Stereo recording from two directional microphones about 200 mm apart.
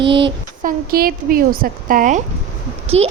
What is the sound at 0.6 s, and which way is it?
Speech, 45° right (ahead or behind).